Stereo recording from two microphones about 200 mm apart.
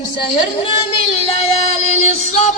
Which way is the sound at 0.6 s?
30° left (ahead or behind).